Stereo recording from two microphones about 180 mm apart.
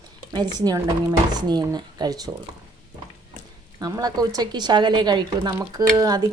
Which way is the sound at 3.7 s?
20° right (ahead or behind).